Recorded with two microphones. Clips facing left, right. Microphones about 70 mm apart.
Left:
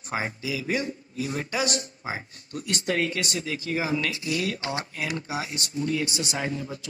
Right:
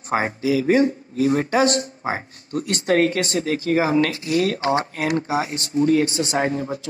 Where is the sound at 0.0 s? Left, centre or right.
Right.